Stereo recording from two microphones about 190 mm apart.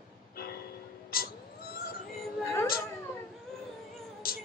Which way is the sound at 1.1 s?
50° left (ahead or behind).